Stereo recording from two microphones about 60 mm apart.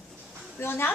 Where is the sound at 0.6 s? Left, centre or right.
Left.